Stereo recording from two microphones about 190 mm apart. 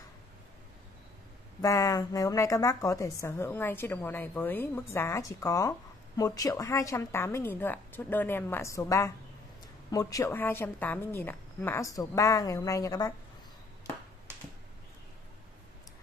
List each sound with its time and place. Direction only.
1.6 s a woman's voice: 20° left (ahead or behind)